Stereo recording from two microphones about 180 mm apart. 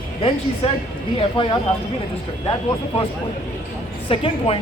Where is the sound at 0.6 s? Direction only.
35° left (ahead or behind).